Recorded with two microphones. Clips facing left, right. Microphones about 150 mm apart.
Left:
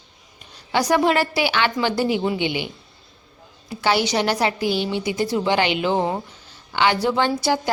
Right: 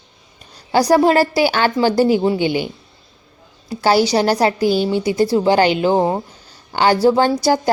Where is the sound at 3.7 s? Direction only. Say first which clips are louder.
Right 6 dB; 40° right (ahead or behind).